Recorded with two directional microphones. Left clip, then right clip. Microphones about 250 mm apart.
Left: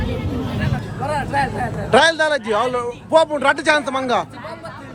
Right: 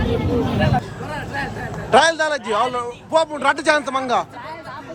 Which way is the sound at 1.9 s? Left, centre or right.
Centre.